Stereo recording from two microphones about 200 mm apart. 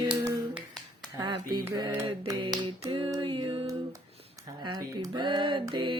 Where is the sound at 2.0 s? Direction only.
25° right (ahead or behind).